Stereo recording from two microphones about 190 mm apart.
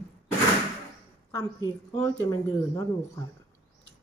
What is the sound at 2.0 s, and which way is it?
Speech, 15° left (ahead or behind).